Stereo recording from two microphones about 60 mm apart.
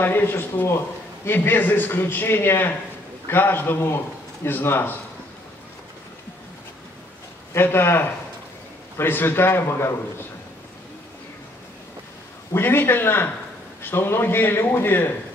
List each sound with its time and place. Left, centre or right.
0.0 s a man's voice: left
7.5 s a man's voice: left
12.5 s a man's voice: left